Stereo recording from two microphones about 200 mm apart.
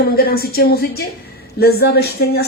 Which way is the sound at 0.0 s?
50° left (ahead or behind).